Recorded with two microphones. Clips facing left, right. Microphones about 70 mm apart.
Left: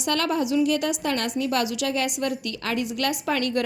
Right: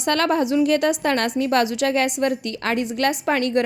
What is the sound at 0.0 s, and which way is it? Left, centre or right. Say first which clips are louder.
A woman's voice: right 4 dB; right.